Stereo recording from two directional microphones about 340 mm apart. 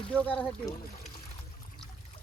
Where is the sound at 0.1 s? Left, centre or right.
Centre.